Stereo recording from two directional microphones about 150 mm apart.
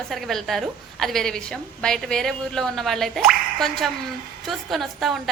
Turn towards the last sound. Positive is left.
turn(degrees=0)  # may be behind; listen again after turning